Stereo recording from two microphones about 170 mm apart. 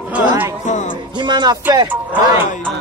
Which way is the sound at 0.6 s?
45° left (ahead or behind).